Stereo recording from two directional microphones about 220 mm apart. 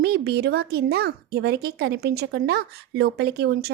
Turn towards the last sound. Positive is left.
turn(degrees=-45)  # may be behind; listen again after turning